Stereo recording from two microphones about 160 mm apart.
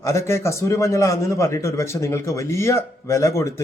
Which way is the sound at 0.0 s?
15° left (ahead or behind).